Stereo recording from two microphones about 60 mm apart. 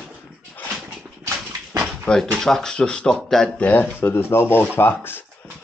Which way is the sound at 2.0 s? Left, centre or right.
Centre.